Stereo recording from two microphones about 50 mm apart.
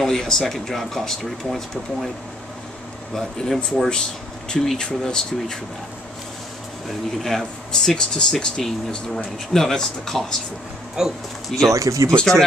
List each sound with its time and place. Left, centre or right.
0.0 s speech: centre
3.2 s speech: centre
3.9 s speech: centre
7.2 s speech: centre
11.0 s speech: centre
11.7 s speech: right